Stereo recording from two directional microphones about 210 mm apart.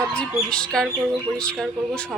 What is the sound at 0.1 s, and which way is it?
A woman's voice, 5° left (ahead or behind).